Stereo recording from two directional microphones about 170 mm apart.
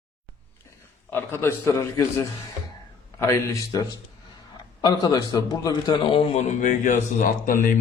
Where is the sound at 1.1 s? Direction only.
15° left (ahead or behind).